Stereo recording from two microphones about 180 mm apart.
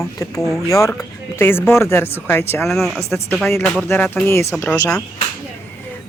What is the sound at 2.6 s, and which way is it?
Speech, centre (ahead or behind).